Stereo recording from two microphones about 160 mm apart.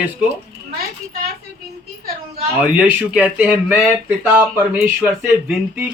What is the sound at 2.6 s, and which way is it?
Speech, 10° right (ahead or behind).